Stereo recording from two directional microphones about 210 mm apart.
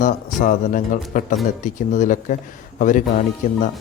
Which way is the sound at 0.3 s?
40° left (ahead or behind).